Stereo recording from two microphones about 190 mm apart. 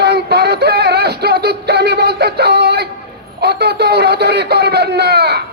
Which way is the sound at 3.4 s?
60° right (ahead or behind).